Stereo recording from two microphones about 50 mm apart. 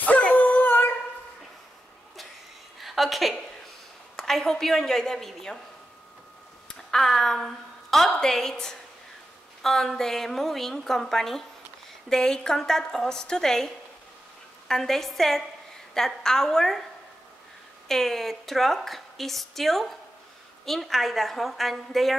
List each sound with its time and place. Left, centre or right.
0.3 s dog: left
2.8 s a sound: centre
4.2 s a woman's voice: centre
6.9 s a woman's voice: centre
14.7 s a woman's voice: centre
17.8 s a woman's voice: centre